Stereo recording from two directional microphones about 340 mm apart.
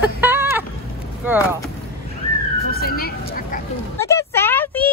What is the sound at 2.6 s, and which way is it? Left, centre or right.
Vehicle, left.